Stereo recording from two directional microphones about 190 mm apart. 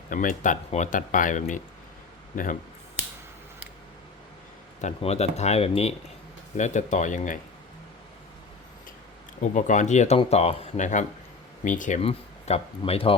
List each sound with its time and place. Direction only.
0.1 s speech: 45° left (ahead or behind)
4.8 s speech: 35° left (ahead or behind)
9.4 s speech: 40° left (ahead or behind)